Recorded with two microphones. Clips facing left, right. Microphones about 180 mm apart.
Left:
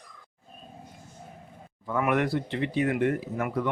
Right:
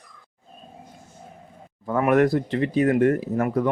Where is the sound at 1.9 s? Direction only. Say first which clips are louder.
Right 7 dB; 45° right (ahead or behind).